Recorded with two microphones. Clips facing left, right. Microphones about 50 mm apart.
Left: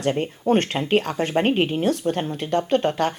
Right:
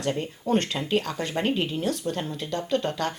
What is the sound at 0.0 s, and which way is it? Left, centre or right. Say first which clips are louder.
Speech: left 6 dB; left.